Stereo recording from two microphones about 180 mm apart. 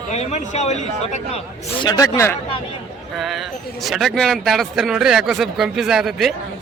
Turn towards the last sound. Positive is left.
turn(degrees=0)  # may be behind; listen again after turning